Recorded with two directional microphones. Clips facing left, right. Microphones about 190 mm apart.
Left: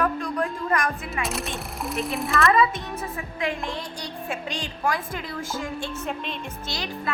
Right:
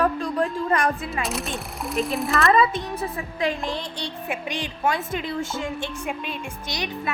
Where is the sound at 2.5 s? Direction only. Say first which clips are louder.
Right 1 dB; 35° right (ahead or behind).